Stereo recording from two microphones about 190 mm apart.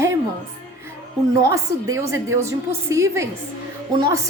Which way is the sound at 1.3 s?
20° right (ahead or behind).